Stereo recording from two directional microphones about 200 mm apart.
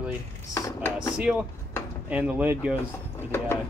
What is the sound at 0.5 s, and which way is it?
Speech, 15° left (ahead or behind).